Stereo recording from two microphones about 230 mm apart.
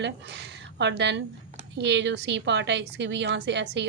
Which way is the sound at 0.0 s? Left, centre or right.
Right.